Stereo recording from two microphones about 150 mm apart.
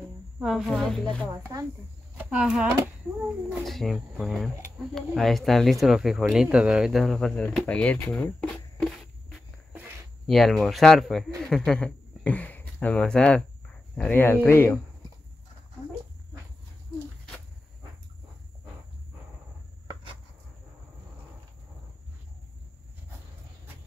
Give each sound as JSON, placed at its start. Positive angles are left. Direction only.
{"t": 0.4, "sound": "speech", "side_deg": -5}
{"t": 2.1, "sound": "speech", "side_deg": -5}
{"t": 9.7, "sound": "a sound", "side_deg": -10}
{"t": 10.2, "sound": "a man's voice", "side_deg": 0}